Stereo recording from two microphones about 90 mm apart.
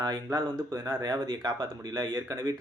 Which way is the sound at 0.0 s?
40° right (ahead or behind).